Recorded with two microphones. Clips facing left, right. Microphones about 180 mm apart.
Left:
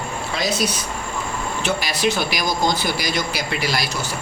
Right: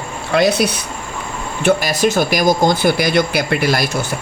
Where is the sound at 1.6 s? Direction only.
45° right (ahead or behind).